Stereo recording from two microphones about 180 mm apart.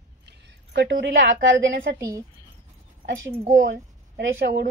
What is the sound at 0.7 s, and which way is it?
Speech, 80° right.